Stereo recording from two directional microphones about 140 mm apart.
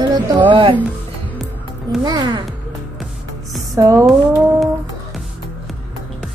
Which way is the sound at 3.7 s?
25° right (ahead or behind).